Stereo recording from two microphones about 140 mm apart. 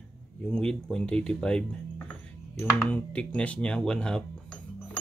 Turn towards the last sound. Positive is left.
turn(degrees=5)  # may be behind; listen again after turning